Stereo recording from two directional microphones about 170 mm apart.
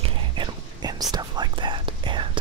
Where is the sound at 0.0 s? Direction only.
25° right (ahead or behind).